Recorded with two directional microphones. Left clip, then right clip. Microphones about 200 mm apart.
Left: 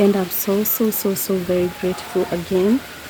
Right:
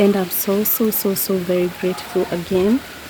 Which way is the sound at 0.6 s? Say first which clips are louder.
Right 1 dB; 45° left (ahead or behind).